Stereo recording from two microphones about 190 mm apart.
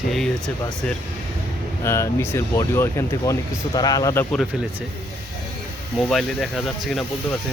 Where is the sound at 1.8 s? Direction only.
15° left (ahead or behind).